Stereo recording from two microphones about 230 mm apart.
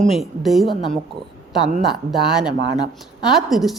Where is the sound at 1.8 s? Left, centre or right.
Centre.